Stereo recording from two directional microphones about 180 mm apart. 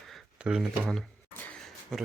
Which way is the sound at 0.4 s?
Centre (ahead or behind).